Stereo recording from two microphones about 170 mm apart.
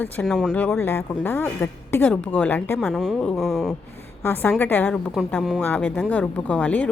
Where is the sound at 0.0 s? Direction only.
5° left (ahead or behind).